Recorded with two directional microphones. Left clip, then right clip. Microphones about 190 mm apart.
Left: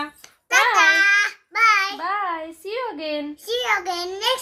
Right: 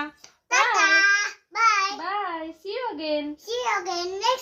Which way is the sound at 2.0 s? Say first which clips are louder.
Left 4 dB; 30° left (ahead or behind).